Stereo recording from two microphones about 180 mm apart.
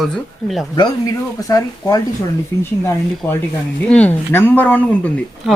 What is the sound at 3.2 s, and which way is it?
Speech, 10° left (ahead or behind).